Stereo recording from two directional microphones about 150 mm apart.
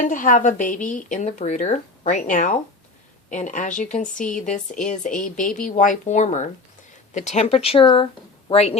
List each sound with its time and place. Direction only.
0.0 s speech: 60° left (ahead or behind); by 8.8 s 45° left (ahead or behind)